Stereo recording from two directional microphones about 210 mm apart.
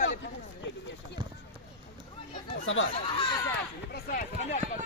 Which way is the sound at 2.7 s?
65° left (ahead or behind).